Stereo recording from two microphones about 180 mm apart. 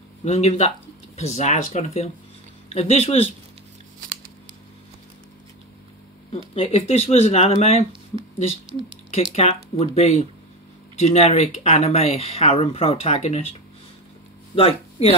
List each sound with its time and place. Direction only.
0.2 s speech: 35° left (ahead or behind)
6.3 s speech: 30° left (ahead or behind)
9.1 s speech: 35° left (ahead or behind)